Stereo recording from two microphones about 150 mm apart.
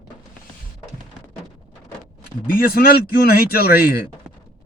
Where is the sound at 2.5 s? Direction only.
80° left.